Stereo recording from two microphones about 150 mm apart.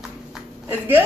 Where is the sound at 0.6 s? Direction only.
15° right (ahead or behind).